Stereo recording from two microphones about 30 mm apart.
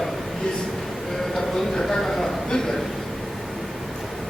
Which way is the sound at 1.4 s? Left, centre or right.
Centre.